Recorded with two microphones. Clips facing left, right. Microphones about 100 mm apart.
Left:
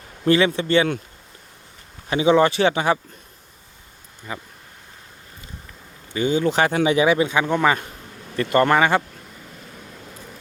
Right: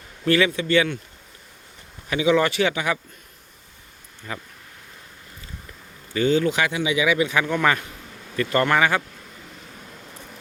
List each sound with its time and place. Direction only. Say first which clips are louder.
0.3 s speech: left 2 dB; 30° left (ahead or behind)
2.0 s speech: left 3 dB; 30° left (ahead or behind)
4.3 s speech: left 1 dB; 20° left (ahead or behind)
6.1 s speech: right 1 dB; 15° left (ahead or behind)
6.4 s speech: left 4 dB; 35° left (ahead or behind)